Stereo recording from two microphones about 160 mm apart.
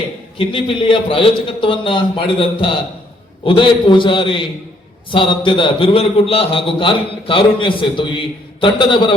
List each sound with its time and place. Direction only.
0.3 s a man's voice: 30° left (ahead or behind)